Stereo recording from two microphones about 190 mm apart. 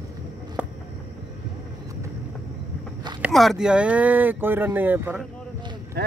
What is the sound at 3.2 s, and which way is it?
Speech, centre (ahead or behind).